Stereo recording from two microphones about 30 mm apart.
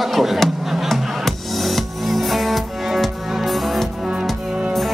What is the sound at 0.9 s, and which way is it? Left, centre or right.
Music, centre.